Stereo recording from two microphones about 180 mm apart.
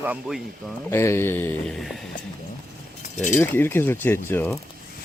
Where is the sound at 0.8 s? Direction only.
15° left (ahead or behind).